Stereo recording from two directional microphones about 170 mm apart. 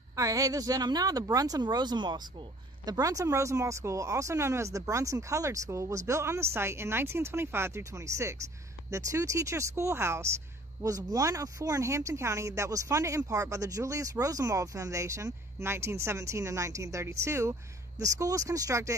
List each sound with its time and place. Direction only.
0.1 s speech: 20° right (ahead or behind)